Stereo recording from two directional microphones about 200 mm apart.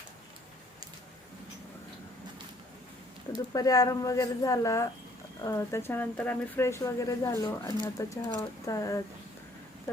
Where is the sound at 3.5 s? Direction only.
20° left (ahead or behind).